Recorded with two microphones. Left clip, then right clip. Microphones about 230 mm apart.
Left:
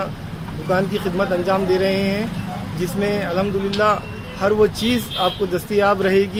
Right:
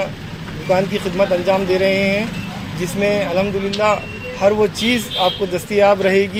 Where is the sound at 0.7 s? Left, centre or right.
Centre.